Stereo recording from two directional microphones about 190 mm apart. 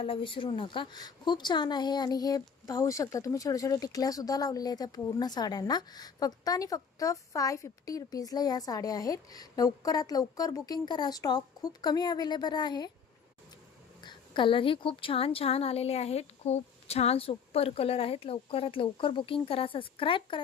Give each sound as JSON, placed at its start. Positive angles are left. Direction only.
{"t": 0.0, "sound": "speech", "side_deg": 25}
{"t": 14.0, "sound": "speech", "side_deg": 25}